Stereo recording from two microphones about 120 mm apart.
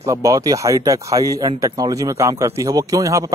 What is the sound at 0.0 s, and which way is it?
Speech, 25° right (ahead or behind).